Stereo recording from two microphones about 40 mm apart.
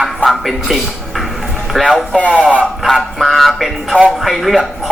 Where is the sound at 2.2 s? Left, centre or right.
Left.